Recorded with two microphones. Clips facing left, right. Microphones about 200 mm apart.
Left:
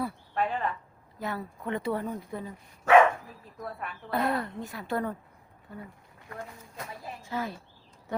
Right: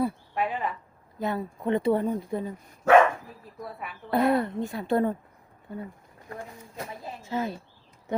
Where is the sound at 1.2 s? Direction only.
25° right (ahead or behind).